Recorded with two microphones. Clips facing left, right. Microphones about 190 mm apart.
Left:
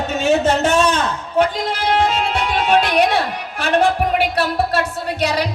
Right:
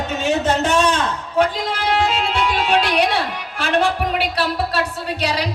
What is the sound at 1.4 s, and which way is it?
Music, 50° left (ahead or behind).